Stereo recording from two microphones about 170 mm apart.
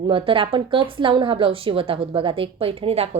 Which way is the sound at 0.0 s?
30° right (ahead or behind).